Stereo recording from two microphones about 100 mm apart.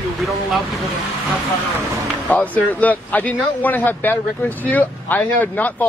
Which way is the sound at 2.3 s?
15° left (ahead or behind).